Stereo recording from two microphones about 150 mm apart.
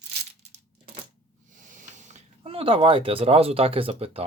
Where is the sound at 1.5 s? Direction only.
60° right (ahead or behind).